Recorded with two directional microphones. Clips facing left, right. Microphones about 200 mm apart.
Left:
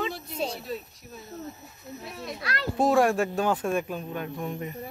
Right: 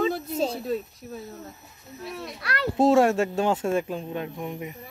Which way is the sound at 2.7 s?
25° right (ahead or behind).